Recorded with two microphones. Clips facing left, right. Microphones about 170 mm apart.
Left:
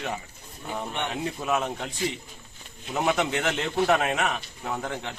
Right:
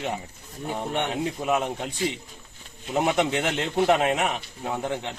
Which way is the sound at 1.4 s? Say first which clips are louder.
Right 1 dB; 15° right (ahead or behind).